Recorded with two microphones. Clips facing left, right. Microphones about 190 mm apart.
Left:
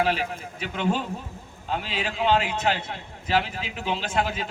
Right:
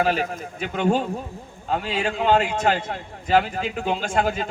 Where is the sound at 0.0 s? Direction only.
45° right (ahead or behind).